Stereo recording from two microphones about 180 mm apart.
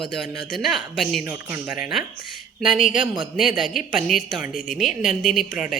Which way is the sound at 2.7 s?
45° left (ahead or behind).